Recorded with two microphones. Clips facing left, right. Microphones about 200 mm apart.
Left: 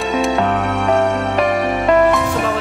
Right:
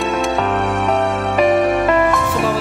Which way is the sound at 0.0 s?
Centre (ahead or behind).